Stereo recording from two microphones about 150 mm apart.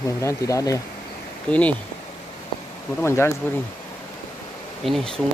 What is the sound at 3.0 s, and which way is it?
Speech, 15° left (ahead or behind).